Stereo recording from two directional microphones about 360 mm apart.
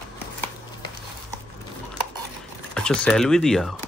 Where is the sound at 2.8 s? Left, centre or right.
Centre.